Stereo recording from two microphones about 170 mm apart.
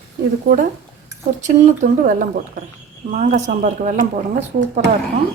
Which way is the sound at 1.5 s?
50° right (ahead or behind).